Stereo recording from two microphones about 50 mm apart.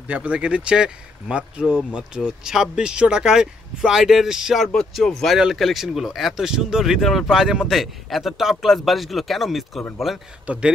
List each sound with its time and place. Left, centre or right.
0.1 s speech: right; by 4.6 s centre
4.9 s speech: centre
10.4 s speech: right